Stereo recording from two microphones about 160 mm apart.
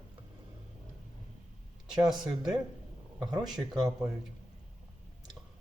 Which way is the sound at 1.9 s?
25° right (ahead or behind).